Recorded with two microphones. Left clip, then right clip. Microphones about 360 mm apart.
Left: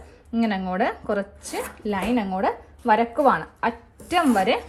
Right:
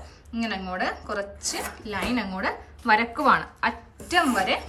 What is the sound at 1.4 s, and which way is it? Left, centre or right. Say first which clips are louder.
Speech: even; centre.